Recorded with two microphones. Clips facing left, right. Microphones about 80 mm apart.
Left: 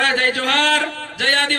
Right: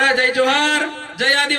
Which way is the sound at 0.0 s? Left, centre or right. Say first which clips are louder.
Right 3 dB; right.